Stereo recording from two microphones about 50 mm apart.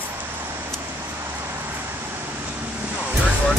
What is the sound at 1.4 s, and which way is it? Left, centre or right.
Vehicle, right.